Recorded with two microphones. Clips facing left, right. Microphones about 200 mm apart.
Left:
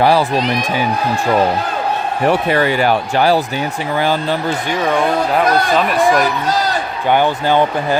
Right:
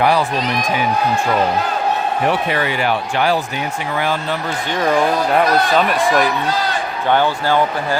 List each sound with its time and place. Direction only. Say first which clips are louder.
0.0 s speech: left 3 dB; 35° left (ahead or behind)
2.5 s speech: left 5 dB; 45° left (ahead or behind)
4.9 s speech: even; centre (ahead or behind)
7.1 s speech: left 2 dB; 15° left (ahead or behind)